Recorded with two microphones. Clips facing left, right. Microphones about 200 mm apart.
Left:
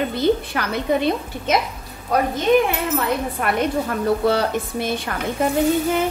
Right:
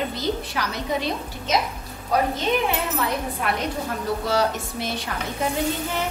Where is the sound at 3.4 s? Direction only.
55° left (ahead or behind).